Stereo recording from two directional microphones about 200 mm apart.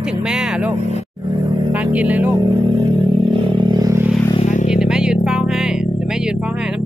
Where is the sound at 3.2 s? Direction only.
25° right (ahead or behind).